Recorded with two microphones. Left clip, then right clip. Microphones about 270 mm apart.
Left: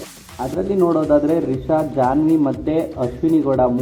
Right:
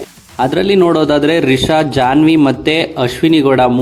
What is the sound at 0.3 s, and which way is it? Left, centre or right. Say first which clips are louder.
Speech: right 8 dB; right.